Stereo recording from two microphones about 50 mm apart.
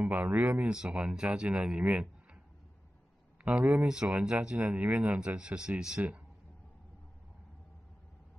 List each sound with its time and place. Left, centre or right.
0.0 s speech: right
3.6 s speech: centre